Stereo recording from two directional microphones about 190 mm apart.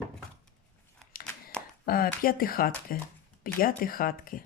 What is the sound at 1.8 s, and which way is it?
Speech, 50° left (ahead or behind).